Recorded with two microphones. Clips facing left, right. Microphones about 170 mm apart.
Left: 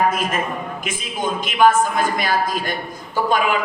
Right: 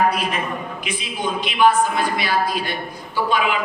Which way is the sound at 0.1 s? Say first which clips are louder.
Left 1 dB; 45° left (ahead or behind).